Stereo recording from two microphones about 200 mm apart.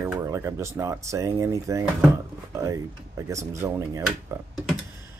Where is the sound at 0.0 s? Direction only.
15° right (ahead or behind).